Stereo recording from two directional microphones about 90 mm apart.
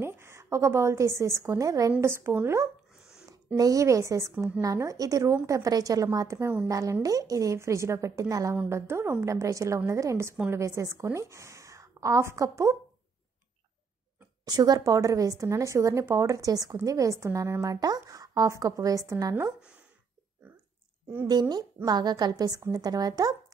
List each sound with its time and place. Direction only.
0.0 s a woman's voice: 30° right (ahead or behind)
3.5 s a woman's voice: 40° right (ahead or behind)
14.4 s a woman's voice: 45° right (ahead or behind)
21.3 s a woman's voice: 50° right (ahead or behind)